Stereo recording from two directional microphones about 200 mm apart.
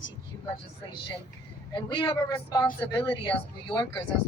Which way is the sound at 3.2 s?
20° left (ahead or behind).